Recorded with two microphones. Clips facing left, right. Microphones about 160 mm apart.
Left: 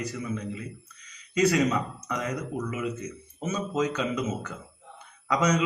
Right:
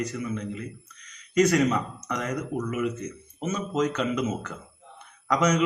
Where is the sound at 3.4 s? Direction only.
10° left (ahead or behind).